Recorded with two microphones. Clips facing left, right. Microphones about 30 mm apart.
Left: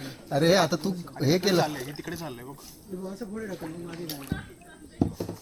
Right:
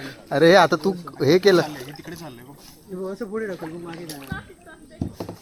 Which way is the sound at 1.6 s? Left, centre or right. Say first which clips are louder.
Left 1 dB; centre.